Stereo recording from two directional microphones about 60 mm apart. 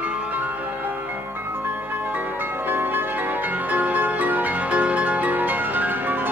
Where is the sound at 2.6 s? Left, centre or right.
Right.